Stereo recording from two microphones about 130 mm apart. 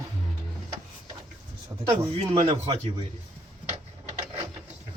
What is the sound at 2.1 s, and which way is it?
Speech, 50° right (ahead or behind).